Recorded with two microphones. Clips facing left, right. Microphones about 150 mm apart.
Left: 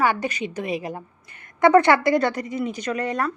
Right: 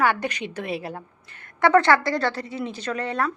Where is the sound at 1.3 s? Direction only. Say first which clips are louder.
Even; 60° right (ahead or behind).